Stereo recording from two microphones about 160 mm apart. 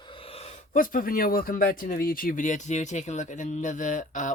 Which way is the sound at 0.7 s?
60° left (ahead or behind).